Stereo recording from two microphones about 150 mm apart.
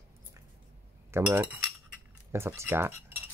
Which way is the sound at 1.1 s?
10° right (ahead or behind).